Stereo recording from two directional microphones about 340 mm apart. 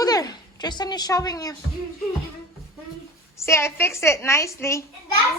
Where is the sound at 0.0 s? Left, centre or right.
Centre.